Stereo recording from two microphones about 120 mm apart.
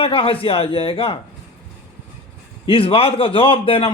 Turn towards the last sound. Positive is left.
turn(degrees=50)  # may be behind; listen again after turning